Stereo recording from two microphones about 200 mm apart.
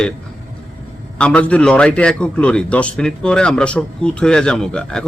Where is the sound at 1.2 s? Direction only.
5° left (ahead or behind).